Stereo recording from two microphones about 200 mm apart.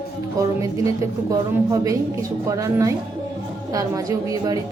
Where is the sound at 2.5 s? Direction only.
15° right (ahead or behind).